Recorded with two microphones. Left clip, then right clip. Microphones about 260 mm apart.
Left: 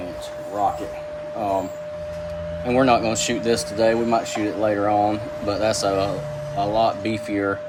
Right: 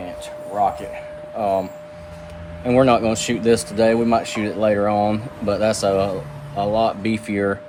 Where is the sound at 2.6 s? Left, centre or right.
Right.